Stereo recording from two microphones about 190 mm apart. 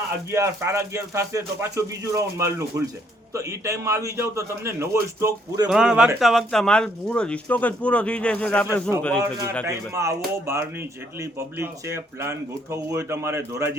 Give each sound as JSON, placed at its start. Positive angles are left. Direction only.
{"t": 0.3, "sound": "speech", "side_deg": -15}
{"t": 5.7, "sound": "speech", "side_deg": -5}
{"t": 9.6, "sound": "speech", "side_deg": -15}